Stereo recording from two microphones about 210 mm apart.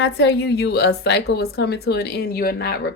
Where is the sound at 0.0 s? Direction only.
55° left (ahead or behind).